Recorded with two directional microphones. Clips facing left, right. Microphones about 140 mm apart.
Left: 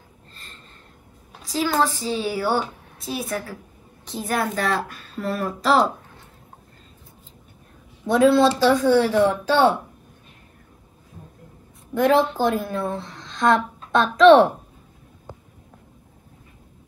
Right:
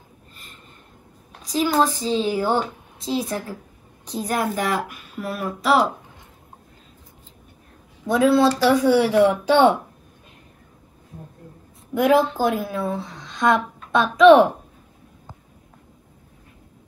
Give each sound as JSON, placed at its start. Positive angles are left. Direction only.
{"t": 1.4, "sound": "speech", "side_deg": -20}
{"t": 8.1, "sound": "speech", "side_deg": 0}
{"t": 11.9, "sound": "speech", "side_deg": -5}